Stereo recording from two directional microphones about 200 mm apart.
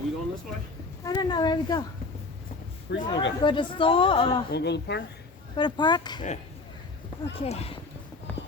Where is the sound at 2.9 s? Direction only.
55° left (ahead or behind).